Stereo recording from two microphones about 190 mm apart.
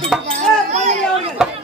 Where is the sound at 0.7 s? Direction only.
35° right (ahead or behind).